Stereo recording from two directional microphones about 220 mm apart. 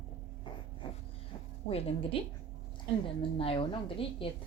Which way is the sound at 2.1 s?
25° left (ahead or behind).